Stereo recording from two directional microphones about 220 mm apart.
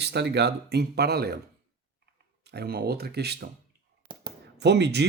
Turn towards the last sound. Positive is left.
turn(degrees=-50)  # may be behind; listen again after turning